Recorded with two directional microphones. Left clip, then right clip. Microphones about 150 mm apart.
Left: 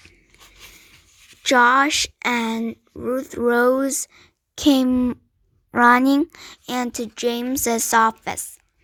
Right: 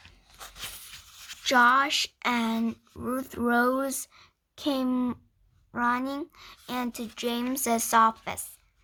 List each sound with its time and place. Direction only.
1.5 s speech: 35° left (ahead or behind)
4.9 s a woman's voice: 20° left (ahead or behind)
5.7 s a woman's voice: 50° left (ahead or behind); by 8.4 s 30° left (ahead or behind)